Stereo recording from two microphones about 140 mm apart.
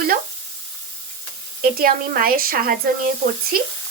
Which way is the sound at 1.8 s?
90° right.